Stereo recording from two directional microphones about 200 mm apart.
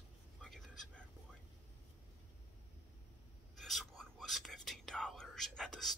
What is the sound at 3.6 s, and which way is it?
Speech, centre (ahead or behind).